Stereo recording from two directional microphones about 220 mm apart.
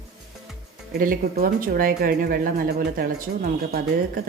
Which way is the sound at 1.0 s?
40° right (ahead or behind).